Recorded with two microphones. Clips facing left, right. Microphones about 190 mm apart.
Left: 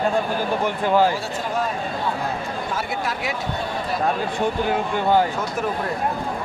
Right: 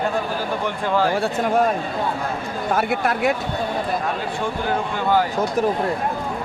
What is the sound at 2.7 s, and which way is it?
Speech, 55° right (ahead or behind).